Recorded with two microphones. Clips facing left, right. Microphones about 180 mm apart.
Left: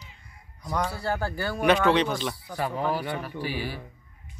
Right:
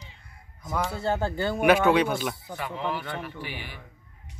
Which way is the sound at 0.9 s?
25° right (ahead or behind).